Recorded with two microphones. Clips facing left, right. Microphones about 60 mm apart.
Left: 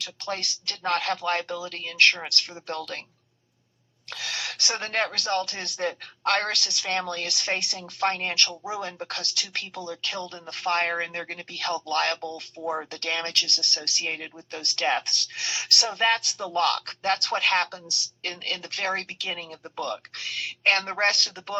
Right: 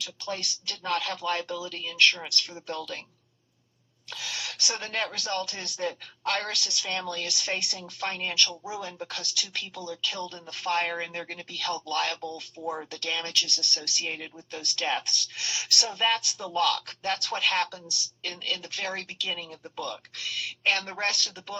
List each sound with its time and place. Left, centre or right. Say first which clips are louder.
0.0 s a woman's voice: left 2 dB; left
4.1 s a woman's voice: left 3 dB; left